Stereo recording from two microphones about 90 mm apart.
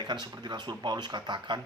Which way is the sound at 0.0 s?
55° right (ahead or behind).